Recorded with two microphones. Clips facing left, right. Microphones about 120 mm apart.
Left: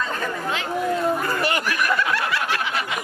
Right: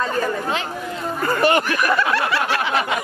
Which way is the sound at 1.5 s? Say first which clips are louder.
Right 5 dB; 30° right (ahead or behind).